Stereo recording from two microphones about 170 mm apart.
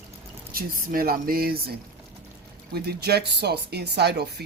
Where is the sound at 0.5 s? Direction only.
60° right (ahead or behind).